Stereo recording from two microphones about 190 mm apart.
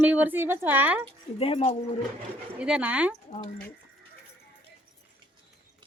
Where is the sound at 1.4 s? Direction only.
30° left (ahead or behind).